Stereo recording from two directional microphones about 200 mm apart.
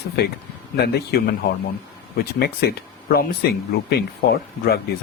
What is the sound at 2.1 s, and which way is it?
Speech, 50° left (ahead or behind).